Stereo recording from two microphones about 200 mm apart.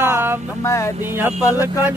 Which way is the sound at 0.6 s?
15° left (ahead or behind).